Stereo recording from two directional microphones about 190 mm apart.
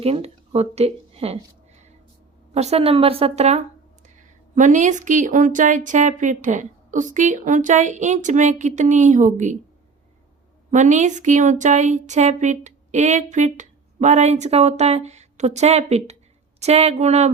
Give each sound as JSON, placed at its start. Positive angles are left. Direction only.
{"t": 0.0, "sound": "speech", "side_deg": -30}
{"t": 2.5, "sound": "a woman's voice", "side_deg": -35}
{"t": 10.7, "sound": "a woman's voice", "side_deg": -40}